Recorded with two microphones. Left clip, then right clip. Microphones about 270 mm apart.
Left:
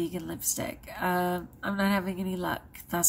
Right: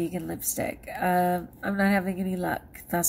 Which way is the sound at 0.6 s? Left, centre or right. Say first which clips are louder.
Right 6 dB; left.